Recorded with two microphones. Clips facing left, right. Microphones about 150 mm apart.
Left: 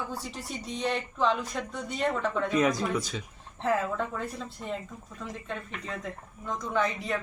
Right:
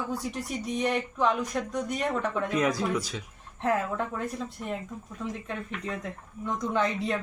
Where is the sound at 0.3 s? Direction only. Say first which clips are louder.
Right 5 dB; 15° right (ahead or behind).